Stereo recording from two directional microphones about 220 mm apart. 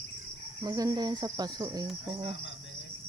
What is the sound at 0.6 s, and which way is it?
Speech, 15° right (ahead or behind).